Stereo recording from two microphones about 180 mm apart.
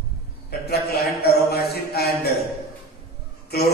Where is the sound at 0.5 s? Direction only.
60° left (ahead or behind).